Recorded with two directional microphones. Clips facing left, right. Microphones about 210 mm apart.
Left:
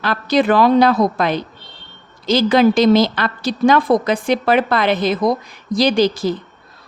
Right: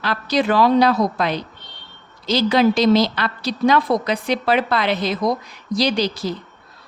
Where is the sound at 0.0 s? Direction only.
55° left (ahead or behind).